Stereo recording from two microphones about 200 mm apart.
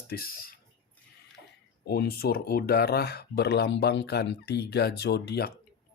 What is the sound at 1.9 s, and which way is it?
Speech, 50° left (ahead or behind).